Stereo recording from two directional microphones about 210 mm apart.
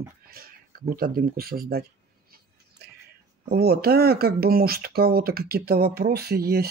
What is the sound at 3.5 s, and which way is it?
Speech, 50° right (ahead or behind).